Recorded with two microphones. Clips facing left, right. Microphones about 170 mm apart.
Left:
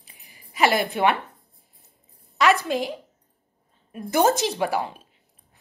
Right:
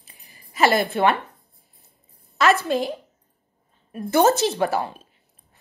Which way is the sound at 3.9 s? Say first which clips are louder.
Right 2 dB; 15° left (ahead or behind).